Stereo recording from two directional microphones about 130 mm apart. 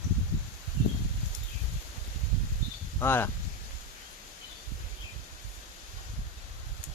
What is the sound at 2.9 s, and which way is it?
Speech, 15° left (ahead or behind).